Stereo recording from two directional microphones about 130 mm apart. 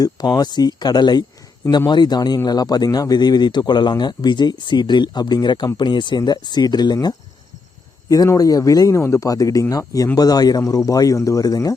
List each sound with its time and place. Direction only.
0.0 s a man's voice: 30° left (ahead or behind)
8.1 s speech: 25° left (ahead or behind)